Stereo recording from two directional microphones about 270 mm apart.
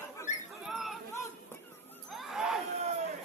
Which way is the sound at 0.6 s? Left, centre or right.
Centre.